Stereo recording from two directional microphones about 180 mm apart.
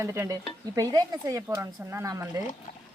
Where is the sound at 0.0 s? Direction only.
15° right (ahead or behind).